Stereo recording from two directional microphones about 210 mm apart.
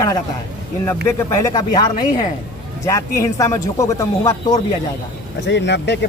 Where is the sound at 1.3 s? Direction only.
15° left (ahead or behind).